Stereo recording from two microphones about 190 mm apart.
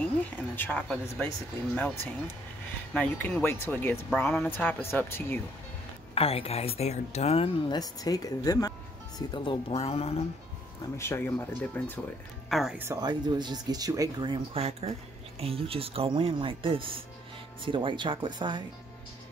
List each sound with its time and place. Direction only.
0.6 s speech: 10° left (ahead or behind)
6.1 s speech: 30° left (ahead or behind)
11.0 s speech: 15° left (ahead or behind)
12.4 s speech: centre (ahead or behind)
12.8 s speech: 20° right (ahead or behind)